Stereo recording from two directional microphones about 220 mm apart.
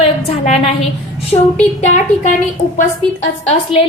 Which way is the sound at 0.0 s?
25° left (ahead or behind).